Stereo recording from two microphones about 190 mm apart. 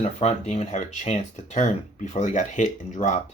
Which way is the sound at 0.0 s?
35° left (ahead or behind).